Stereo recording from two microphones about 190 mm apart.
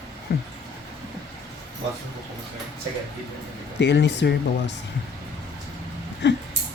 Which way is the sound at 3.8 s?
70° left (ahead or behind).